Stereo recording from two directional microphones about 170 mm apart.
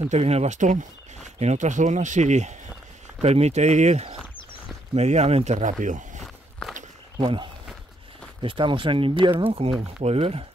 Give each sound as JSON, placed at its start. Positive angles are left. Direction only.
{"t": 0.0, "sound": "speech", "side_deg": -40}
{"t": 7.2, "sound": "speech", "side_deg": -30}